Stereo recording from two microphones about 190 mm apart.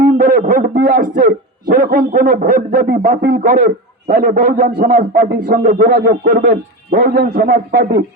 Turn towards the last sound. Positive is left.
turn(degrees=-50)  # may be behind; listen again after turning